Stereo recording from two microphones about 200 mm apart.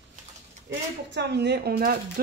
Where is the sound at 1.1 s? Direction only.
60° right (ahead or behind).